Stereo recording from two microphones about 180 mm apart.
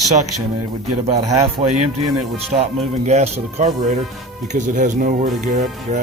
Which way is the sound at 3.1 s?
35° right (ahead or behind).